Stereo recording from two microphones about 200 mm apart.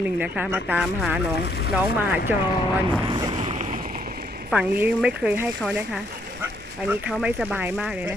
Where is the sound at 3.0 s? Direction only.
25° right (ahead or behind).